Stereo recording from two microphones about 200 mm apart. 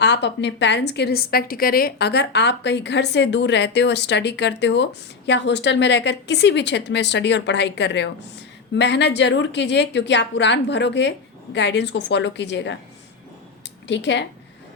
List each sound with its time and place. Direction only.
0.0 s a woman's voice: 60° left (ahead or behind)
13.8 s a woman's voice: 60° left (ahead or behind)